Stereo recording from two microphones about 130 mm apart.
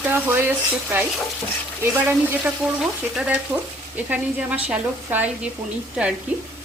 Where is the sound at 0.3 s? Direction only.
15° right (ahead or behind).